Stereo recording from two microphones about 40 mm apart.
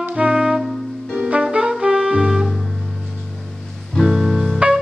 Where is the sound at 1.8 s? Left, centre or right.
Right.